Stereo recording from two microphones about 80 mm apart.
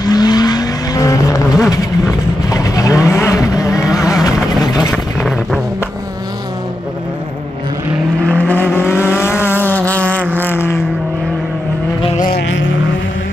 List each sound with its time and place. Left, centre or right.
0.1 s vehicle: left
4.9 s vehicle: centre
8.3 s vehicle: centre